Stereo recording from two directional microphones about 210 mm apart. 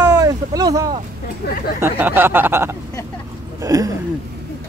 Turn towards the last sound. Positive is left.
turn(degrees=-15)  # may be behind; listen again after turning